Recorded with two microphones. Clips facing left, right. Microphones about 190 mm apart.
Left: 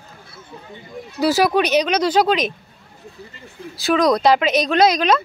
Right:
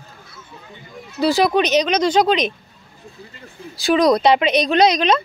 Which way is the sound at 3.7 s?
Centre (ahead or behind).